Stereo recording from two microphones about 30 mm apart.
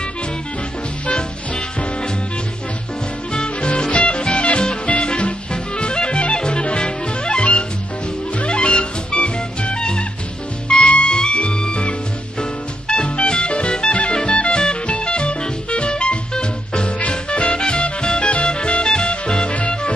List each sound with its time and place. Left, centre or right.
1.0 s swing music: left
3.3 s music: left